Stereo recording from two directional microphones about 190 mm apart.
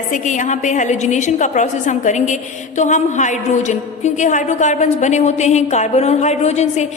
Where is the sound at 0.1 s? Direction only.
40° left (ahead or behind).